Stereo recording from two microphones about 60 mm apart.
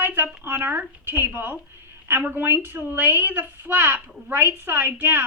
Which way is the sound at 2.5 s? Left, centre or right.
Right.